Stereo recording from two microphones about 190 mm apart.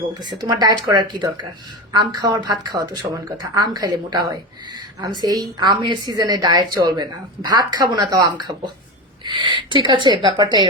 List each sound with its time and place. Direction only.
0.1 s a woman's voice: 20° right (ahead or behind)